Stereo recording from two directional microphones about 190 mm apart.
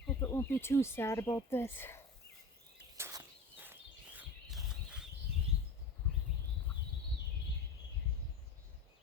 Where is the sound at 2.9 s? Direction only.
15° right (ahead or behind).